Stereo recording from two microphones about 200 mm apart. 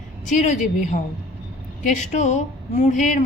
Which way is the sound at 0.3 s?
40° left (ahead or behind).